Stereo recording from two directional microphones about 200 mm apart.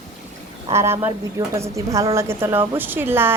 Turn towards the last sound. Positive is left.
turn(degrees=-10)  # may be behind; listen again after turning